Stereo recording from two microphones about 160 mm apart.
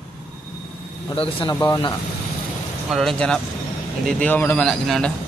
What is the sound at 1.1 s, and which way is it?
Speech, 35° left (ahead or behind).